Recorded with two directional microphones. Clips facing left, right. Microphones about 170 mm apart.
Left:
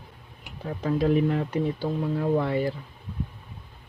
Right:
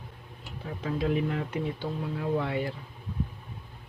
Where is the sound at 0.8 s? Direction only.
40° left (ahead or behind).